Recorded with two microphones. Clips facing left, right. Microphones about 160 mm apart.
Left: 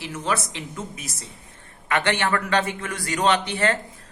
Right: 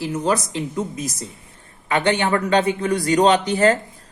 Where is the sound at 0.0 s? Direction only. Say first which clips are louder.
Right 6 dB; 35° right (ahead or behind).